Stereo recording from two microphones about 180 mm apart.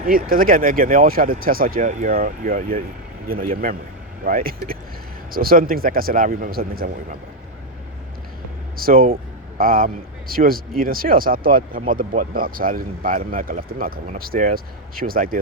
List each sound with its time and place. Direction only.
0.0 s a man's voice: 50° right (ahead or behind)
8.7 s a man's voice: 55° right (ahead or behind)